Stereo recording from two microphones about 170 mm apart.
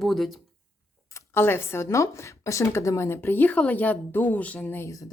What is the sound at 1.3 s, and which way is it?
A woman's voice, 15° left (ahead or behind).